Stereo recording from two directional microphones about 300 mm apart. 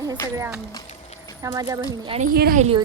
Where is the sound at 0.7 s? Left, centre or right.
Centre.